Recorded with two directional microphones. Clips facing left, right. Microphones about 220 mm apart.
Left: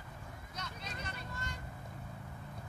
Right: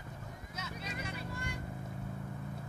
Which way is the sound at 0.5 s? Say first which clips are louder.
Right 3 dB; 5° right (ahead or behind).